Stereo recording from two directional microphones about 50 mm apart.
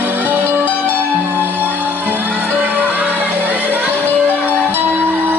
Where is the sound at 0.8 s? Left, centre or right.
Left.